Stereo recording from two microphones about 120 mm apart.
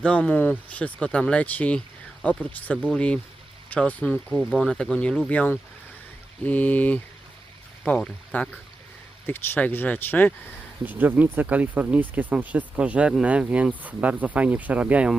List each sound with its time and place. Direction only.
0.0 s speech: 10° left (ahead or behind)
10.8 s speech: 15° right (ahead or behind)